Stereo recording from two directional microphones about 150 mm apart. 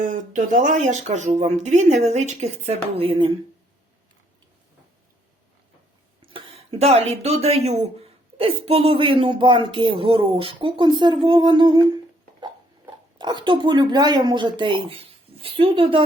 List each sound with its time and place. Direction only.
0.0 s speech: 60° right (ahead or behind); by 3.3 s 35° right (ahead or behind)
6.2 s speech: 35° right (ahead or behind)